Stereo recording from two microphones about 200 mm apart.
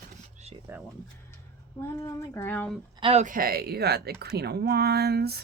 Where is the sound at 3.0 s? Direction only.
30° right (ahead or behind); by 5.4 s 50° right (ahead or behind).